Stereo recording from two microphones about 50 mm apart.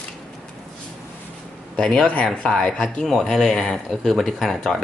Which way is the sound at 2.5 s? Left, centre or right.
Centre.